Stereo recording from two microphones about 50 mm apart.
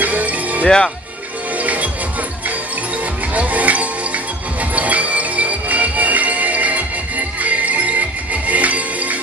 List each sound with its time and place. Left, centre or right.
0.0 s music: right
0.7 s speech: centre
1.6 s music: right
3.3 s music: right